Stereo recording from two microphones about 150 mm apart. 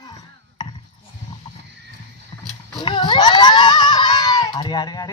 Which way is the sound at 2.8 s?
30° left (ahead or behind).